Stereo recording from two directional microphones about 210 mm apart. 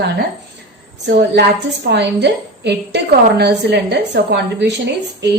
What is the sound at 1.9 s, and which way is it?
A woman's voice, 55° right (ahead or behind).